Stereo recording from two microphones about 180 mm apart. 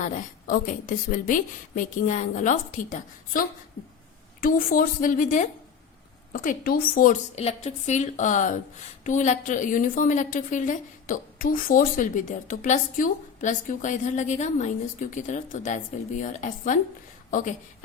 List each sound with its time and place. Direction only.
0.0 s a woman's voice: 45° left (ahead or behind)